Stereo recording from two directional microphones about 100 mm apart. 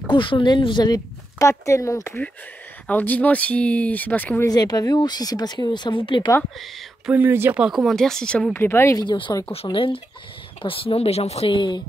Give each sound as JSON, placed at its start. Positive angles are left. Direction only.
{"t": 0.1, "sound": "speech", "side_deg": 55}
{"t": 1.5, "sound": "speech", "side_deg": 30}
{"t": 2.9, "sound": "speech", "side_deg": 15}
{"t": 4.5, "sound": "speech", "side_deg": 40}
{"t": 7.1, "sound": "speech", "side_deg": -20}
{"t": 7.6, "sound": "speech", "side_deg": 0}
{"t": 8.5, "sound": "speech", "side_deg": 25}
{"t": 8.9, "sound": "speech", "side_deg": 50}
{"t": 9.5, "sound": "speech", "side_deg": 65}
{"t": 11.5, "sound": "speech", "side_deg": 50}